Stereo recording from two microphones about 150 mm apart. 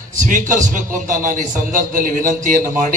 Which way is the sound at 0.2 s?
60° right (ahead or behind).